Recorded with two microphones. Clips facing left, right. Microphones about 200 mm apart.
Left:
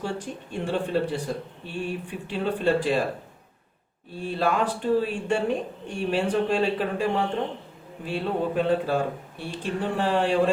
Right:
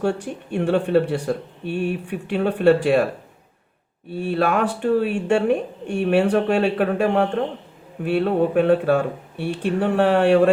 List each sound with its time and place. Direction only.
0.0 s speech: 65° right (ahead or behind)
4.2 s speech: 65° right (ahead or behind)